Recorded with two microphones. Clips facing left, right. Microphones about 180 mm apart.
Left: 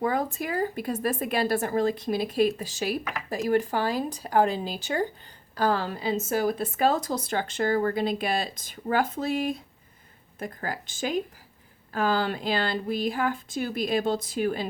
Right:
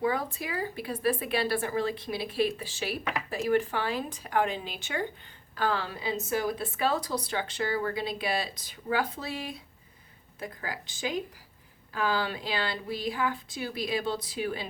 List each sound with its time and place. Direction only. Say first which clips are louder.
0.0 s speech: left 3 dB; 45° left (ahead or behind)